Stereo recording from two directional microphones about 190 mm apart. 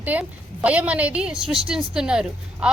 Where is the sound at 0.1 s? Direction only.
5° right (ahead or behind).